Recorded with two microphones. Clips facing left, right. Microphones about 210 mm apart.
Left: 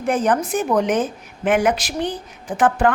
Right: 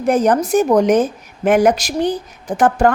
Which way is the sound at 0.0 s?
40° right (ahead or behind).